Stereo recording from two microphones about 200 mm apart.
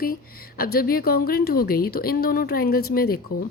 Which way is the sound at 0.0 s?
45° left (ahead or behind).